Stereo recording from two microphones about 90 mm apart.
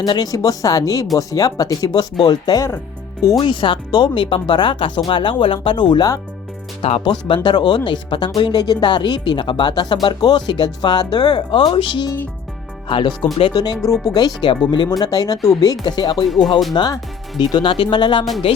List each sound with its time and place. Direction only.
0.0 s speech: 45° left (ahead or behind)
3.4 s speech: 65° left (ahead or behind)
6.9 s speech: 65° left (ahead or behind)
13.5 s speech: 45° left (ahead or behind)
16.2 s speech: centre (ahead or behind)
16.7 s speech: 50° left (ahead or behind)